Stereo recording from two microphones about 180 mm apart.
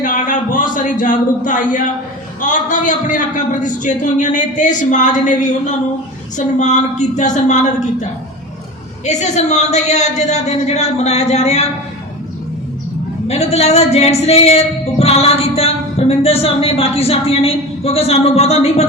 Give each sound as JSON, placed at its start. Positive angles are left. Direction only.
{"t": 0.0, "sound": "a sound", "side_deg": 45}
{"t": 2.4, "sound": "a man's voice", "side_deg": 45}
{"t": 9.0, "sound": "speech", "side_deg": 40}
{"t": 13.2, "sound": "speech", "side_deg": 35}